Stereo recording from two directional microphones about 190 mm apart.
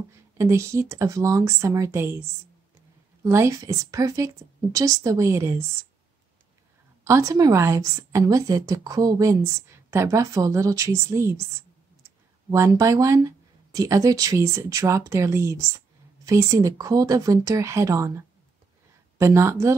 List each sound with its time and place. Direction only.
0.4 s a woman's voice: 15° right (ahead or behind)
3.3 s a woman's voice: 15° right (ahead or behind)
7.1 s a woman's voice: 15° right (ahead or behind)
12.4 s a woman's voice: 15° right (ahead or behind)